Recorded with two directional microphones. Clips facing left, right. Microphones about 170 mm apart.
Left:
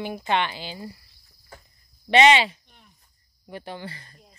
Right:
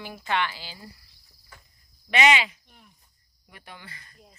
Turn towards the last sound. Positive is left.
turn(degrees=30)  # may be behind; listen again after turning